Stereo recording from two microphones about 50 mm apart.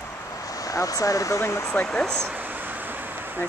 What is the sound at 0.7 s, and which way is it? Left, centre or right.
Speech, left.